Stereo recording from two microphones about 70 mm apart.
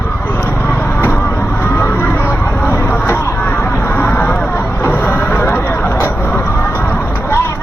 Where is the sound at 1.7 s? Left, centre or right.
Left.